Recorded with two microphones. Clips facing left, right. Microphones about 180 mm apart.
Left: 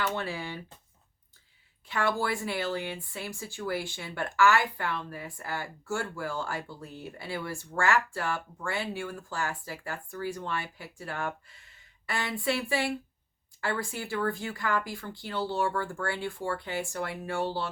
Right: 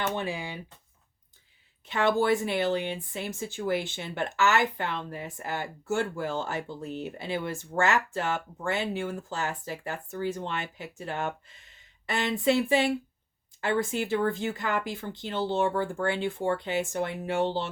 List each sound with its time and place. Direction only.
0.0 s speech: 20° right (ahead or behind)
1.9 s speech: 20° right (ahead or behind)